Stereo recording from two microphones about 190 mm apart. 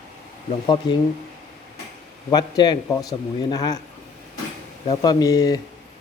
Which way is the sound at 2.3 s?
20° left (ahead or behind).